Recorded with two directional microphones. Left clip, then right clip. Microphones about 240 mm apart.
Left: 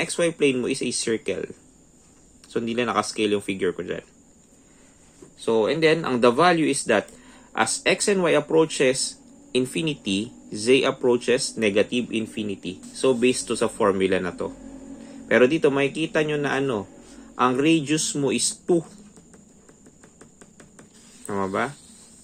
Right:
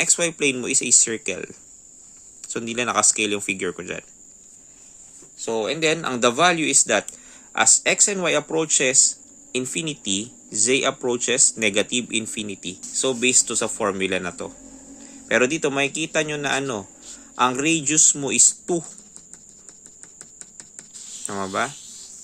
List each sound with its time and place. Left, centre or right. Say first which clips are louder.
0.0 s speech: right 1 dB; right
5.4 s speech: left 3 dB; centre
21.2 s speech: even; right